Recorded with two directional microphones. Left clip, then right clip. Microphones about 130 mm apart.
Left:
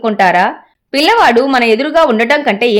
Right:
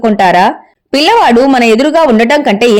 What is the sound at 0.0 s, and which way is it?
A woman's voice, 35° right (ahead or behind).